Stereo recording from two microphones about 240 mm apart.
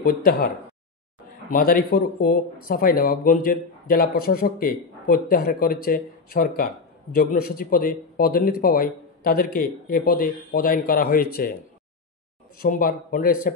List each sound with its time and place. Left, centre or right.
0.0 s speech: left
1.5 s speech: left
12.5 s speech: left